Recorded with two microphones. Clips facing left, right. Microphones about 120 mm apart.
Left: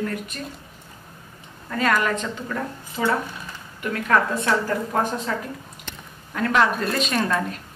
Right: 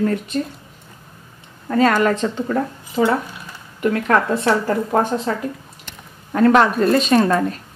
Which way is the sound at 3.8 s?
30° right (ahead or behind).